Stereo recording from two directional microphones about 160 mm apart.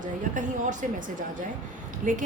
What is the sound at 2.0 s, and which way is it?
Speech, 50° right (ahead or behind).